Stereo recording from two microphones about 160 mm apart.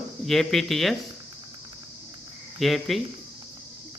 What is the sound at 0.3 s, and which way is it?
Speech, centre (ahead or behind).